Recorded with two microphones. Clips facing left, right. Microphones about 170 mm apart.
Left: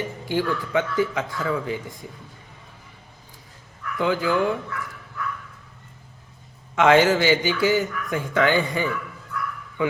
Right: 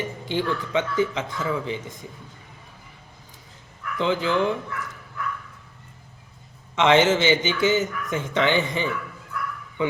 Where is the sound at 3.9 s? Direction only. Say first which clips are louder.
Left 1 dB; 20° right (ahead or behind).